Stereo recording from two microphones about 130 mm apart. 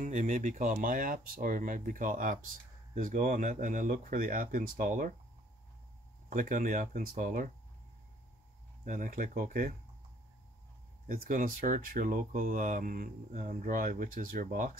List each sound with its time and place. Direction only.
0.0 s speech: 85° right
6.3 s speech: 90° right
8.8 s speech: 85° right
11.1 s speech: 90° right